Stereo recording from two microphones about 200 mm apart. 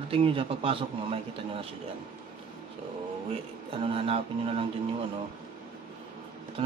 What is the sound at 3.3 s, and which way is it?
Speech, 25° right (ahead or behind).